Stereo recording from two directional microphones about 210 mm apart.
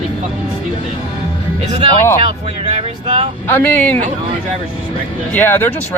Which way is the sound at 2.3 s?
30° right (ahead or behind).